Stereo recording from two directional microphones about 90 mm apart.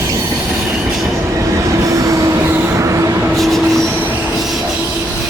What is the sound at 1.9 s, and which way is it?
Train, 35° right (ahead or behind).